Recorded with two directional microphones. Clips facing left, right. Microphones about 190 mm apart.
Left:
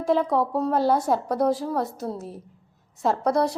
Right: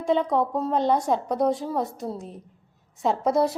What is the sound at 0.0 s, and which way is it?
A woman's voice, centre (ahead or behind).